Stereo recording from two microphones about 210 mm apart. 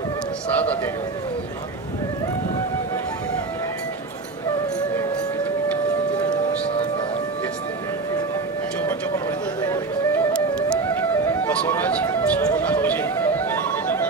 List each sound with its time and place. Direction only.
6.1 s music: 25° left (ahead or behind)
8.8 s music: 10° left (ahead or behind)